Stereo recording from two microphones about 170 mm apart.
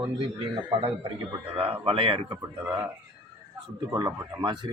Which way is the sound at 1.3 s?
35° right (ahead or behind).